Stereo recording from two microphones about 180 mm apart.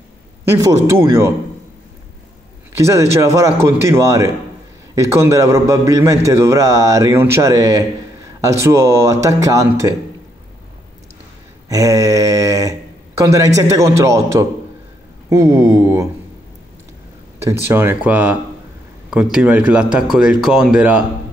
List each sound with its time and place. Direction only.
0.5 s a man's voice: 15° right (ahead or behind)
2.7 s a man's voice: 15° right (ahead or behind)
11.7 s a man's voice: 20° right (ahead or behind)
17.4 s a man's voice: 15° right (ahead or behind)